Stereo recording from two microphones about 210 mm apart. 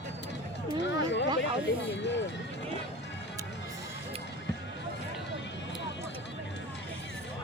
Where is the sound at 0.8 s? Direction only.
55° left (ahead or behind).